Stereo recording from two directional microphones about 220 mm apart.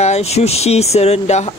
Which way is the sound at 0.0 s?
30° left (ahead or behind).